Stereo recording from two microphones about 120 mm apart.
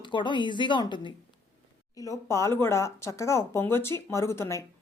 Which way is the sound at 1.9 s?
25° left (ahead or behind).